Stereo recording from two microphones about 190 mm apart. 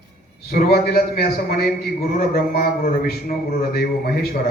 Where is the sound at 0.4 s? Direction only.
55° left (ahead or behind).